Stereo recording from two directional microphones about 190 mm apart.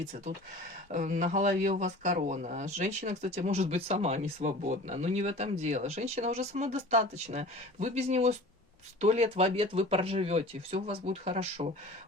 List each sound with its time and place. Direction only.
0.9 s speech: 45° right (ahead or behind)